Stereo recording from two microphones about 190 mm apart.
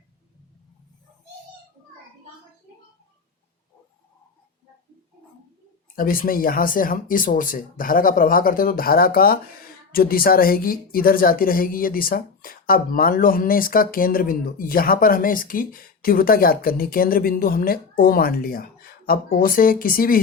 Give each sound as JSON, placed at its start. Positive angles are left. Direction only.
{"t": 6.0, "sound": "speech", "side_deg": 50}